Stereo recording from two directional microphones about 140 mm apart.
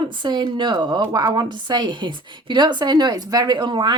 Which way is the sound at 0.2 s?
35° right (ahead or behind).